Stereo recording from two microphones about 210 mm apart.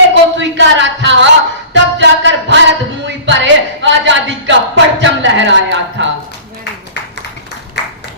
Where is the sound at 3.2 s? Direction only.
60° right (ahead or behind).